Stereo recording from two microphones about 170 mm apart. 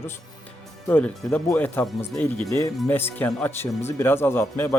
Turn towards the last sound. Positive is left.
turn(degrees=15)  # may be behind; listen again after turning